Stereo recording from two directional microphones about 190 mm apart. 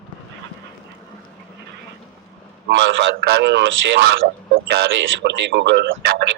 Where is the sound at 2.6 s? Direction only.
65° right (ahead or behind).